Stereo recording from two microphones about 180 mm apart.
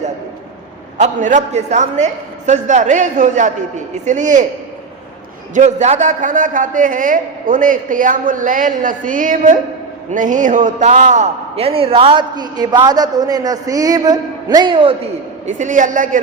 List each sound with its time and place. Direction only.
0.9 s a man's voice: 45° right (ahead or behind)
5.5 s a man's voice: 40° right (ahead or behind)
15.4 s a man's voice: 45° right (ahead or behind)